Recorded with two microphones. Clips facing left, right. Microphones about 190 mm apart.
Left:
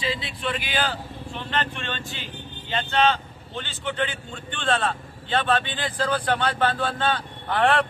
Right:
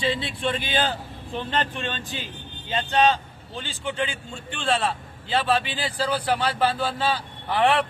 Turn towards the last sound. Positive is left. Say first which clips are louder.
# even
turn(degrees=-10)  # may be behind; listen again after turning